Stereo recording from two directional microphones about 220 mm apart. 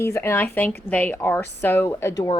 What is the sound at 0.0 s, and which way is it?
Speech, 10° left (ahead or behind).